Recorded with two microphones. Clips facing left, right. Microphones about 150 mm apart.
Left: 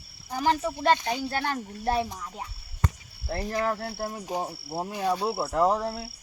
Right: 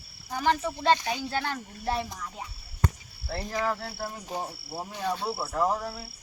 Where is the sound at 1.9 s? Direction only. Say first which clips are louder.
Left 4 dB; 5° left (ahead or behind).